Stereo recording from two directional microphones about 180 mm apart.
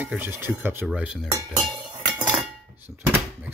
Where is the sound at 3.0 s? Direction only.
10° right (ahead or behind).